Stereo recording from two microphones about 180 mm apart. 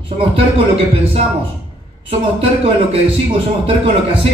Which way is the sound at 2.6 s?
30° right (ahead or behind).